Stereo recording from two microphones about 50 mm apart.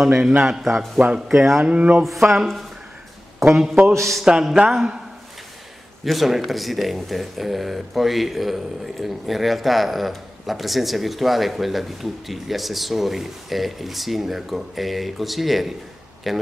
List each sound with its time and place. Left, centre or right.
0.4 s a man's voice: centre
0.9 s speech: right
1.3 s speech: centre
1.6 s speech: right
2.0 s speech: centre
3.5 s a man's voice: centre
6.0 s speech: centre